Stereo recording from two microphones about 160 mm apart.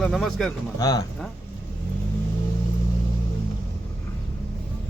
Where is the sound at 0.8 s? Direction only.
25° left (ahead or behind).